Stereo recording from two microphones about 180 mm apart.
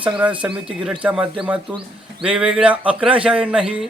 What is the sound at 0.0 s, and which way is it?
Speech, 5° right (ahead or behind).